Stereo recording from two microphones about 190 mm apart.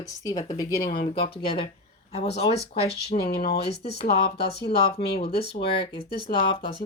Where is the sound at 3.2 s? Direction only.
55° left (ahead or behind).